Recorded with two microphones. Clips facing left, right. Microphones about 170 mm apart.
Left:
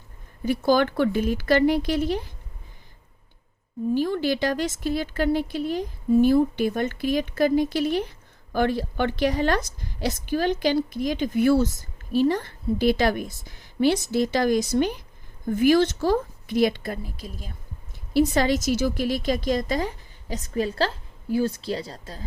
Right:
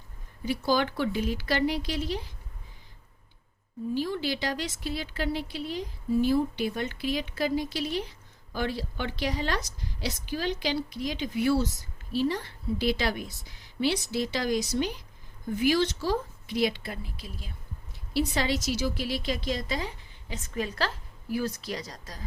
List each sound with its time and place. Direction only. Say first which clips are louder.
0.4 s a woman's voice: left 6 dB; 50° left (ahead or behind)
3.9 s a woman's voice: left 6 dB; 50° left (ahead or behind); by 22.2 s 30° left (ahead or behind)